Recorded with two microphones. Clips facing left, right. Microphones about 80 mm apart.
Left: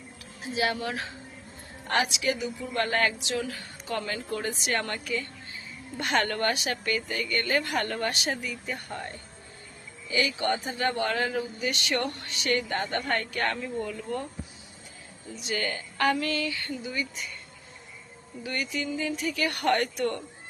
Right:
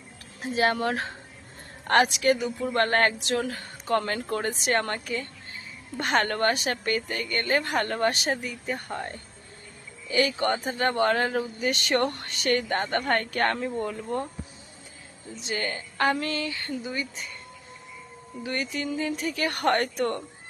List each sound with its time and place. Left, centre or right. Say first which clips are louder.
0.4 s speech: right 4 dB; right
15.4 s speech: even; right
18.4 s speech: right 2 dB; right